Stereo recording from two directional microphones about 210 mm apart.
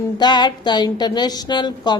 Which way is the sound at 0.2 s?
20° left (ahead or behind).